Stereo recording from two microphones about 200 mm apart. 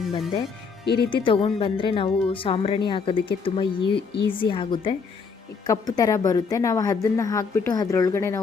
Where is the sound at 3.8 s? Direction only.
55° left (ahead or behind).